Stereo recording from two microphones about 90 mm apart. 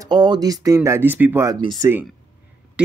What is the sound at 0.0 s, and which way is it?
Speech, 55° right (ahead or behind).